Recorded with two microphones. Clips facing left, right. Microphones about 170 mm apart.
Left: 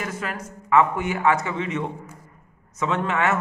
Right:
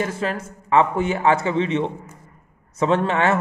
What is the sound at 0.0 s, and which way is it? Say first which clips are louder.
A man's voice: right 6 dB; 30° right (ahead or behind).